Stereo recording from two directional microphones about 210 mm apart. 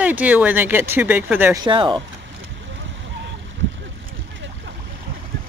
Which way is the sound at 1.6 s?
20° right (ahead or behind).